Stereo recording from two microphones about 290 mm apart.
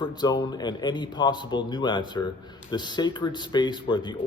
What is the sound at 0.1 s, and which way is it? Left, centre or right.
A man's voice, centre.